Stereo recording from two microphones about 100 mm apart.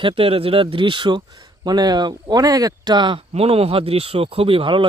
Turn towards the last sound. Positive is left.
turn(degrees=-60)  # may be behind; listen again after turning